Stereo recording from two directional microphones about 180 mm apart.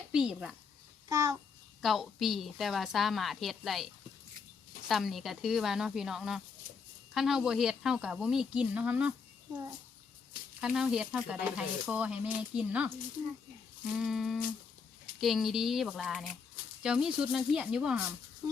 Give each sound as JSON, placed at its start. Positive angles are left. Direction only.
{"t": 0.1, "sound": "speech", "side_deg": -5}
{"t": 1.0, "sound": "babbling", "side_deg": -20}
{"t": 1.8, "sound": "speech", "side_deg": 0}
{"t": 4.9, "sound": "speech", "side_deg": 0}
{"t": 10.6, "sound": "speech", "side_deg": -5}
{"t": 13.9, "sound": "speech", "side_deg": -5}